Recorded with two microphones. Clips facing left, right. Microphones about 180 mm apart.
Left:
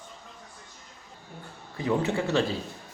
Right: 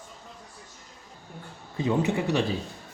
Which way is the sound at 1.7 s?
20° right (ahead or behind).